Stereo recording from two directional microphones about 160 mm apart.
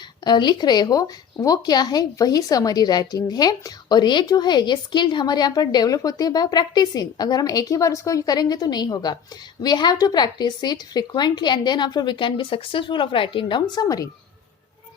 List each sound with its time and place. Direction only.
0.3 s speech: 25° left (ahead or behind)